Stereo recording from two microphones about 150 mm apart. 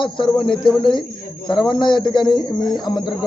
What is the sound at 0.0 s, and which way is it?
A man's voice, 30° left (ahead or behind).